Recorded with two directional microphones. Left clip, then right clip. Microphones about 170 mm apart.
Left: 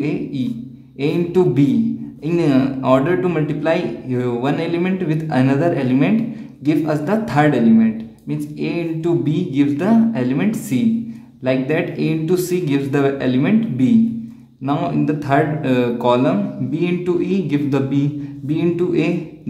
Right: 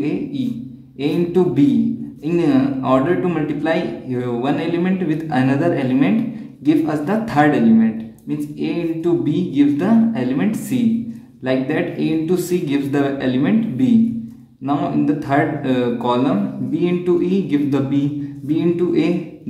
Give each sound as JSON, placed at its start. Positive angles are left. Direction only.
{"t": 0.0, "sound": "speech", "side_deg": 30}